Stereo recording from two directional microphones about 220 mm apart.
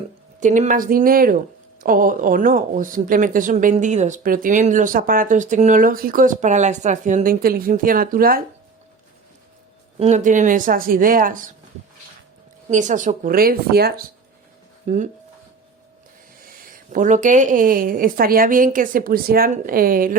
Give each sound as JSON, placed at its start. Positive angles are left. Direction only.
{"t": 0.3, "sound": "speech", "side_deg": -35}
{"t": 10.0, "sound": "speech", "side_deg": -30}
{"t": 12.7, "sound": "speech", "side_deg": -35}
{"t": 14.8, "sound": "speech", "side_deg": -35}
{"t": 16.7, "sound": "speech", "side_deg": -35}